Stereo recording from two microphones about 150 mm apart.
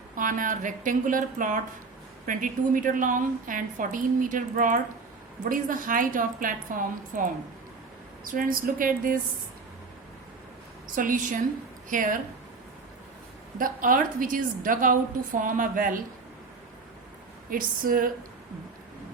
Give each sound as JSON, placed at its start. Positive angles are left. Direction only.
{"t": 0.2, "sound": "a woman's voice", "side_deg": -60}
{"t": 10.9, "sound": "a woman's voice", "side_deg": -60}
{"t": 13.6, "sound": "a woman's voice", "side_deg": -65}
{"t": 17.5, "sound": "a woman's voice", "side_deg": -70}